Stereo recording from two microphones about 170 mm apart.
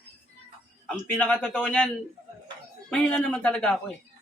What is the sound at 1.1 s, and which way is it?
A man's voice, 5° left (ahead or behind).